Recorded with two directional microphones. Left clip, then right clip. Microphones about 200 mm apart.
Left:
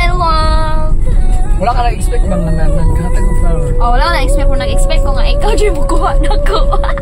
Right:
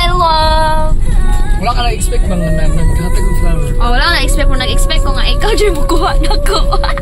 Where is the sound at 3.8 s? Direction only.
10° right (ahead or behind).